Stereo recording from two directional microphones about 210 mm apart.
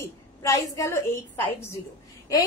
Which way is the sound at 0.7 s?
15° left (ahead or behind).